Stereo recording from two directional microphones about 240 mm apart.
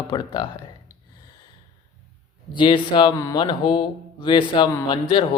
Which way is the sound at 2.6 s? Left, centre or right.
Centre.